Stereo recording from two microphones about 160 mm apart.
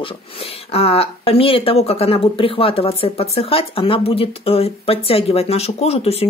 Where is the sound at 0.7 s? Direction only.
35° left (ahead or behind).